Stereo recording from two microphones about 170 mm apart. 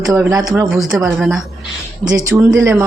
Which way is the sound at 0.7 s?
Centre (ahead or behind).